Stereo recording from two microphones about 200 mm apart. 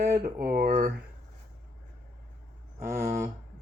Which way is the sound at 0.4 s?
45° right (ahead or behind).